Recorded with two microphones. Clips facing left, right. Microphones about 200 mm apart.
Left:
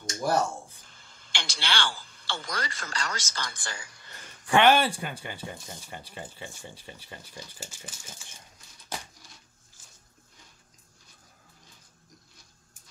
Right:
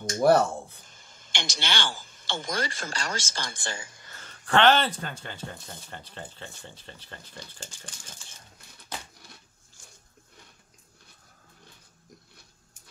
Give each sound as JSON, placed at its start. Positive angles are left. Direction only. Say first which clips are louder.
{"t": 0.0, "sound": "speech", "louder": "right 6 dB", "side_deg": -65}
{"t": 1.4, "sound": "speech", "louder": "even", "side_deg": -20}
{"t": 4.1, "sound": "speech", "louder": "left 1 dB", "side_deg": 10}